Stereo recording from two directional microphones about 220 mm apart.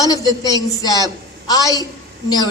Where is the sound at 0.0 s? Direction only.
15° left (ahead or behind).